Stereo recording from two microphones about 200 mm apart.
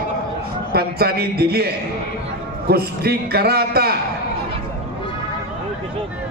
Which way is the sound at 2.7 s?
55° right (ahead or behind).